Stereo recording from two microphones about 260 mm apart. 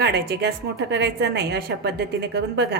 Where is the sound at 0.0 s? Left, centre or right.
Right.